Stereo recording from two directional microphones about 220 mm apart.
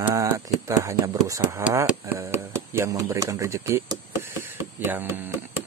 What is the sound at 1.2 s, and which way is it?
Speech, 15° right (ahead or behind).